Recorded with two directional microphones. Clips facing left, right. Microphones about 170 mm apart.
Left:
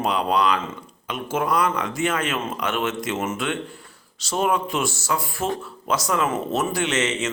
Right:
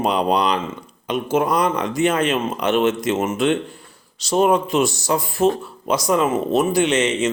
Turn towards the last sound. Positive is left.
turn(degrees=-15)  # may be behind; listen again after turning